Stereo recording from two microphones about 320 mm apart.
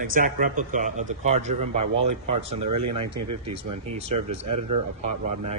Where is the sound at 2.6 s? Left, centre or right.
Right.